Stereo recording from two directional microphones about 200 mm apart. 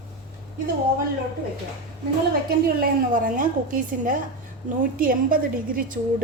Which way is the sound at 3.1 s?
45° right (ahead or behind).